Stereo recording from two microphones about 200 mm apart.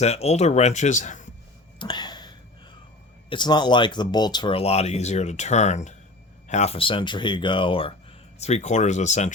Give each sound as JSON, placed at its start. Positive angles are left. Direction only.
{"t": 0.0, "sound": "speech", "side_deg": 30}
{"t": 1.8, "sound": "a sound", "side_deg": 20}
{"t": 3.2, "sound": "speech", "side_deg": 20}